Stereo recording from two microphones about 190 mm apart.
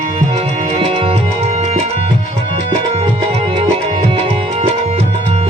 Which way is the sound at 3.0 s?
30° right (ahead or behind).